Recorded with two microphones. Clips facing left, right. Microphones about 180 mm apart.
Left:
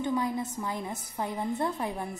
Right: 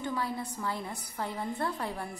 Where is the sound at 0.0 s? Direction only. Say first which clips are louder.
Left 5 dB; 20° left (ahead or behind).